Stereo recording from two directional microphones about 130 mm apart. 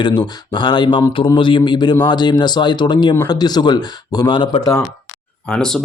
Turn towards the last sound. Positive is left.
turn(degrees=5)  # may be behind; listen again after turning